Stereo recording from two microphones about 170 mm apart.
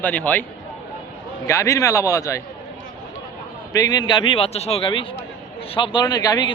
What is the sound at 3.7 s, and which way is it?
Speech, 25° left (ahead or behind).